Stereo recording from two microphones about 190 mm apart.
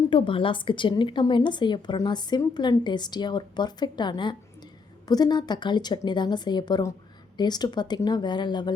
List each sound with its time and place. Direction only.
0.1 s a woman's voice: 25° left (ahead or behind)